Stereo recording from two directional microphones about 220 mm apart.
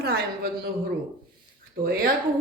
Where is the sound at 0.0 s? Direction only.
45° right (ahead or behind).